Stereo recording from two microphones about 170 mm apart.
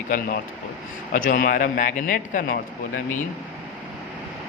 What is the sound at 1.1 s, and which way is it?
A man's voice, 60° left (ahead or behind).